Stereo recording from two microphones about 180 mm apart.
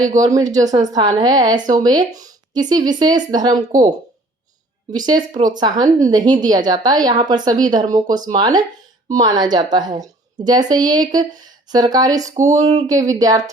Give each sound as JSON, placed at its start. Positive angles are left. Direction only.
{"t": 0.2, "sound": "a woman's voice", "side_deg": -20}
{"t": 3.7, "sound": "speech", "side_deg": -45}
{"t": 4.9, "sound": "a woman's voice", "side_deg": -20}